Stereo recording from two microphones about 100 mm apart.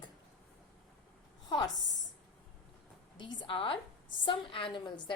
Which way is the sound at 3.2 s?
50° left (ahead or behind).